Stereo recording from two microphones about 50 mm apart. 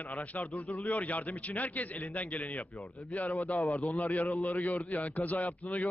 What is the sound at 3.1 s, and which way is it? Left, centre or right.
A man's voice, left.